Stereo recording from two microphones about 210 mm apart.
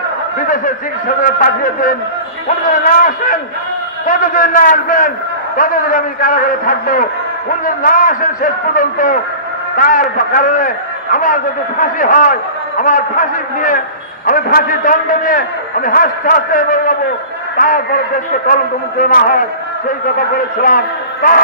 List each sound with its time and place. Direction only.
0.4 s a man's voice: 40° left (ahead or behind)